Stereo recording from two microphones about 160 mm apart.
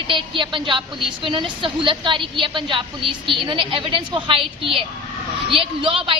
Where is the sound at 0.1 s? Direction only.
30° right (ahead or behind).